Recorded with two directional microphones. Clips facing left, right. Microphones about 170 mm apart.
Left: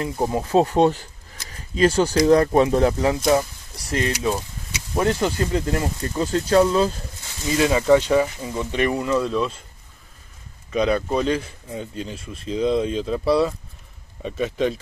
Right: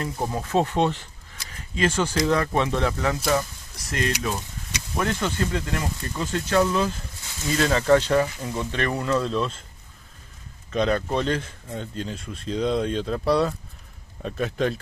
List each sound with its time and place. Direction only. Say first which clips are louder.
0.0 s speech: left 5 dB; 25° left (ahead or behind)
7.5 s speech: left 3 dB; 10° left (ahead or behind)
10.7 s speech: left 3 dB; 5° left (ahead or behind)